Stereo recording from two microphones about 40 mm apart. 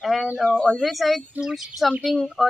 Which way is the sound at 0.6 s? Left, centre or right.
Centre.